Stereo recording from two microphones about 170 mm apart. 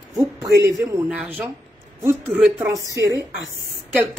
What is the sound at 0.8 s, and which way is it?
Speech, 15° right (ahead or behind).